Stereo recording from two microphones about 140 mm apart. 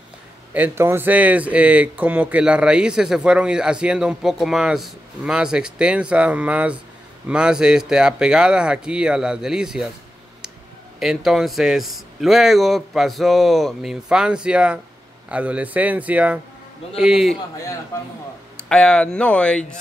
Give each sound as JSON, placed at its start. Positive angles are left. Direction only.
{"t": 0.5, "sound": "a man's voice", "side_deg": -15}
{"t": 11.0, "sound": "a man's voice", "side_deg": 0}
{"t": 17.9, "sound": "speech", "side_deg": 20}
{"t": 18.7, "sound": "speech", "side_deg": 5}